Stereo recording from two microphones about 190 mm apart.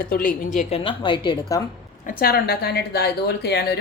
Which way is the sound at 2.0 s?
50° left (ahead or behind).